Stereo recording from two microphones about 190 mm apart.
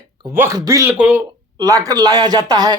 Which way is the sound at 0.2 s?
15° right (ahead or behind).